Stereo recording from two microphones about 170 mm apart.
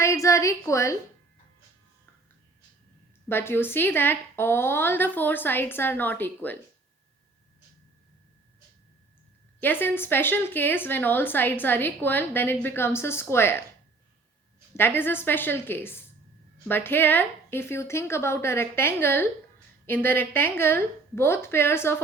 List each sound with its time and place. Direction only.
0.0 s a woman's voice: 15° left (ahead or behind)
3.2 s a woman's voice: 15° left (ahead or behind)
9.6 s a woman's voice: 10° left (ahead or behind)
14.8 s a woman's voice: 10° left (ahead or behind)